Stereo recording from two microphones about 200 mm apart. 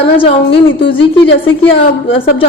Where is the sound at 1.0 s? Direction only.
65° left (ahead or behind).